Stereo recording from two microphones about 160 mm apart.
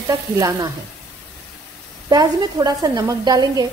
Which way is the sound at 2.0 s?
25° right (ahead or behind).